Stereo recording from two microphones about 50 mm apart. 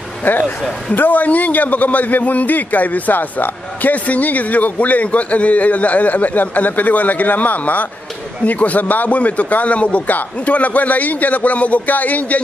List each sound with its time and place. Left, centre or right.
0.9 s a man's voice: left